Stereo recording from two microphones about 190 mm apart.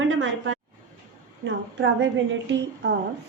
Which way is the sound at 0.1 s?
90° right.